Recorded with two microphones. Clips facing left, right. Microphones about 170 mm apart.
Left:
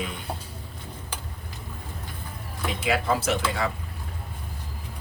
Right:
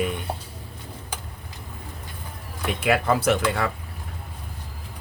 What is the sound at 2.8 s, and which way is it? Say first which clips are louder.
Speech: right 4 dB; 60° right (ahead or behind).